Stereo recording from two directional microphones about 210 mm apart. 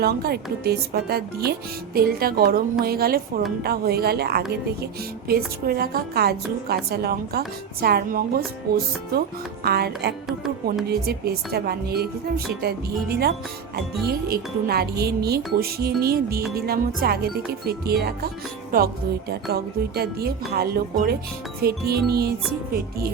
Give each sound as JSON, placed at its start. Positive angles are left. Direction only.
{"t": 0.0, "sound": "a woman's voice", "side_deg": -50}
{"t": 5.6, "sound": "a woman's voice", "side_deg": -45}